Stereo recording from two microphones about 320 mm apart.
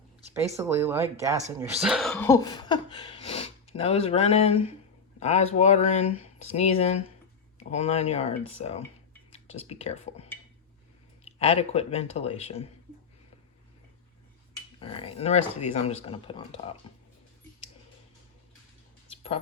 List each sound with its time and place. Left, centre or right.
0.5 s speech: centre
11.3 s speech: centre
14.8 s speech: centre
19.1 s a sound: centre